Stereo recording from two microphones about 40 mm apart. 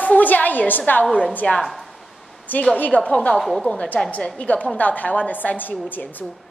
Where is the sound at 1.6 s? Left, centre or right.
Centre.